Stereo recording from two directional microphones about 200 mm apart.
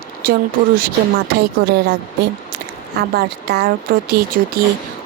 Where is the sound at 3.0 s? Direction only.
50° right (ahead or behind).